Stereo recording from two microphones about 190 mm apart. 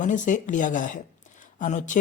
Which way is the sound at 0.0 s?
40° left (ahead or behind).